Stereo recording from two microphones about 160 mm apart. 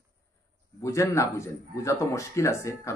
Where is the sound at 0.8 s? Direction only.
20° left (ahead or behind).